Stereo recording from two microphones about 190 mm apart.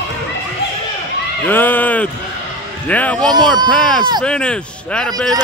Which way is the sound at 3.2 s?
20° right (ahead or behind).